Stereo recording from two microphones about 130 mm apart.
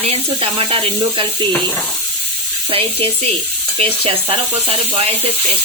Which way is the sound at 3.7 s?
45° right (ahead or behind).